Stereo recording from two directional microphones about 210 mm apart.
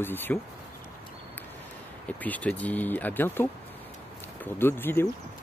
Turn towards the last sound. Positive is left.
turn(degrees=10)  # may be behind; listen again after turning